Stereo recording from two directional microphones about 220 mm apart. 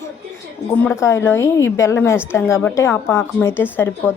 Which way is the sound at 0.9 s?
10° left (ahead or behind).